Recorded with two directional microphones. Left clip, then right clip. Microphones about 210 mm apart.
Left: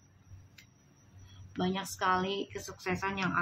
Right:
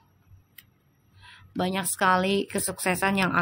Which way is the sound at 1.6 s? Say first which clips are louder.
Right 8 dB; 50° right (ahead or behind).